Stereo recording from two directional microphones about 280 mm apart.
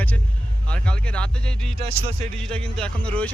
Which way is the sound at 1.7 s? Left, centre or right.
Right.